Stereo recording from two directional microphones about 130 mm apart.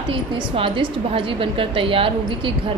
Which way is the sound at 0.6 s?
45° right (ahead or behind).